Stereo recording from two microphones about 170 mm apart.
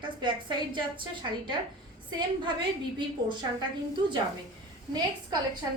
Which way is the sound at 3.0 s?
30° right (ahead or behind).